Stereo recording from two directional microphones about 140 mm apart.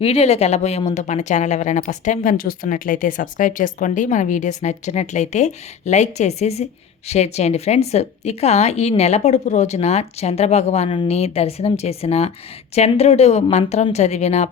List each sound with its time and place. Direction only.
0.0 s a woman's voice: 45° left (ahead or behind)